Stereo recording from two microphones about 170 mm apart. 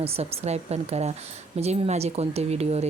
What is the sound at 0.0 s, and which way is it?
Speech, 35° right (ahead or behind).